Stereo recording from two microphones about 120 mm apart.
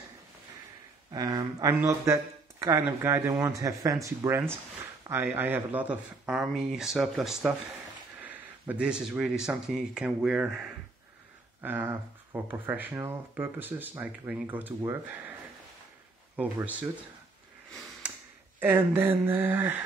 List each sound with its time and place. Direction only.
1.1 s speech: 30° right (ahead or behind); by 7.5 s centre (ahead or behind)
8.2 s speech: 15° right (ahead or behind)
11.6 s speech: 15° right (ahead or behind)
16.3 s speech: 15° right (ahead or behind)
18.6 s speech: 15° right (ahead or behind)